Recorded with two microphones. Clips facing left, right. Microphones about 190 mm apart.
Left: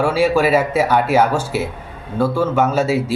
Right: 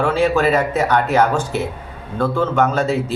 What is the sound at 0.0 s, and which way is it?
Speech, 10° left (ahead or behind).